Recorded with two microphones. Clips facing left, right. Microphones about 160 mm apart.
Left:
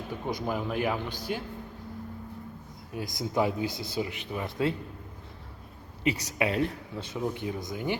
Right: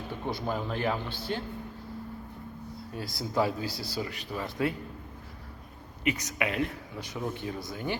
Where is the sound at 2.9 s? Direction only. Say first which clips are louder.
Left 1 dB; 20° left (ahead or behind).